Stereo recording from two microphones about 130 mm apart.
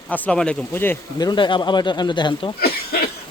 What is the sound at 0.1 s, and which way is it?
Speech, 10° left (ahead or behind).